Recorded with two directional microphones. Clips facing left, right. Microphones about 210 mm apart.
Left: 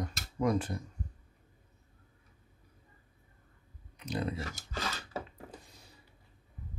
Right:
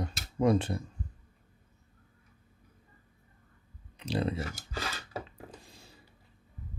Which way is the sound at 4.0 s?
30° right (ahead or behind).